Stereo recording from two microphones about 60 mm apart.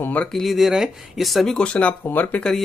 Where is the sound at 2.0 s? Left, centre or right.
Left.